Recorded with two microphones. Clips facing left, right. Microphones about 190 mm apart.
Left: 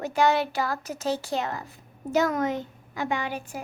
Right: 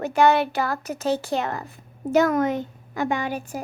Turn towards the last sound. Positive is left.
turn(degrees=-45)  # may be behind; listen again after turning